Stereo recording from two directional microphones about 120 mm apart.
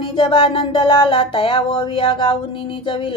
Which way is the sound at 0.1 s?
45° left (ahead or behind).